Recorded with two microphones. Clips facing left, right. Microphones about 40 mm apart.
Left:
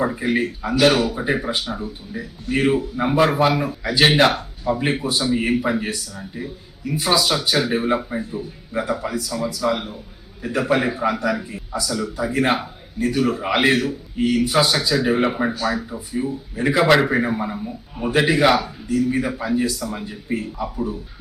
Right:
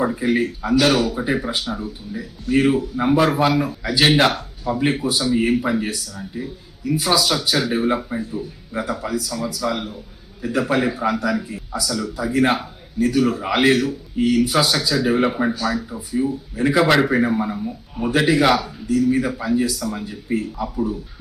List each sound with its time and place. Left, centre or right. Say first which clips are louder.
0.0 s speech: right 1 dB; centre